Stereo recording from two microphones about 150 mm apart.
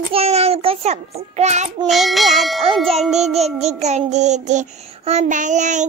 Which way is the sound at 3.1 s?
45° right (ahead or behind).